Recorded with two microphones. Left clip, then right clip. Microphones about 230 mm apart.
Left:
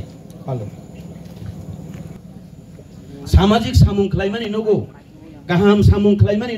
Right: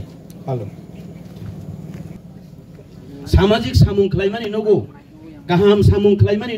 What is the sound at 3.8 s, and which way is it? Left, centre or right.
Speech, right.